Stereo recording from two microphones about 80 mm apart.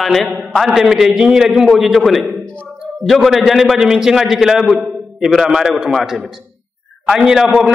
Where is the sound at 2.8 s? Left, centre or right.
Centre.